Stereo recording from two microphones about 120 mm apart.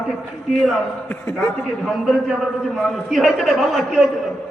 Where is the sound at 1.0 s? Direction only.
15° left (ahead or behind).